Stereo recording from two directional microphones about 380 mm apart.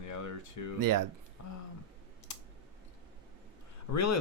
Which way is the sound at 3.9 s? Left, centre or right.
Left.